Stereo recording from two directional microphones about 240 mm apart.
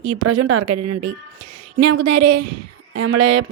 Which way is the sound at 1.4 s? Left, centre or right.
Right.